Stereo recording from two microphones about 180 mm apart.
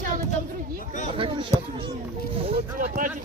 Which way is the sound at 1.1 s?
30° right (ahead or behind).